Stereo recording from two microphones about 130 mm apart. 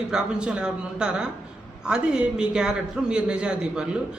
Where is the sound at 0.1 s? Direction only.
5° right (ahead or behind).